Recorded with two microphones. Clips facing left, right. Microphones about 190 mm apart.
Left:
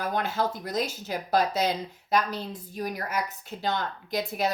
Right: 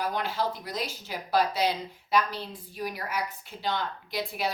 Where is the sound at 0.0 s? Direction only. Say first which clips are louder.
Left 2 dB; 50° left (ahead or behind).